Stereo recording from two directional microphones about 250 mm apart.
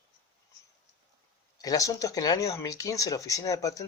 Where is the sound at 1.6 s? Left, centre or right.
Centre.